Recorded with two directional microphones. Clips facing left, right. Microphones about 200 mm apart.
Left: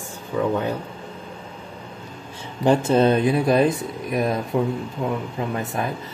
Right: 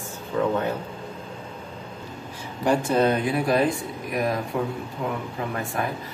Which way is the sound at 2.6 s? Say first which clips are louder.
Left 4 dB; 25° left (ahead or behind).